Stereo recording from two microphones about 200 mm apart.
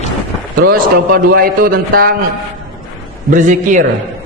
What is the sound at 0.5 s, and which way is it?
A man's voice, 45° right (ahead or behind).